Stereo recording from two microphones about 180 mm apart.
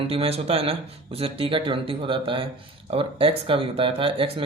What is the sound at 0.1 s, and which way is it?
Speech, 35° right (ahead or behind).